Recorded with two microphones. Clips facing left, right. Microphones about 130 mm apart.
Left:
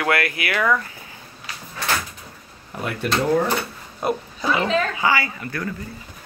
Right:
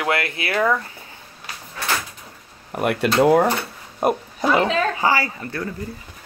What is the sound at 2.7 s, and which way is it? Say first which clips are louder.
Speech: right 6 dB; 75° right (ahead or behind).